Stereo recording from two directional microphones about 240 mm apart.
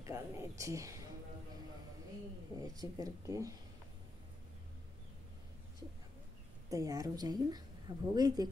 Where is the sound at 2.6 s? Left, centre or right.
Centre.